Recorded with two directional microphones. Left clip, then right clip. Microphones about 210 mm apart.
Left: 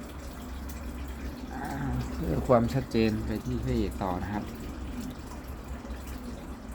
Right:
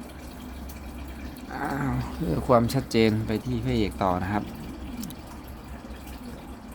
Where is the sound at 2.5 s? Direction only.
20° right (ahead or behind); by 4.4 s 35° right (ahead or behind).